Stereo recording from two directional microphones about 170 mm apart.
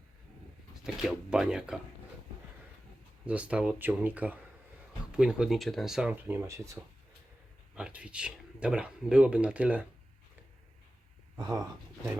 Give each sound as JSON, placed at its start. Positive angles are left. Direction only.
{"t": 1.0, "sound": "speech", "side_deg": -5}
{"t": 3.2, "sound": "speech", "side_deg": -5}
{"t": 11.3, "sound": "speech", "side_deg": -20}